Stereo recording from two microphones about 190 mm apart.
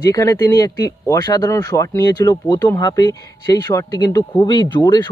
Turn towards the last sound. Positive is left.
turn(degrees=25)  # may be behind; listen again after turning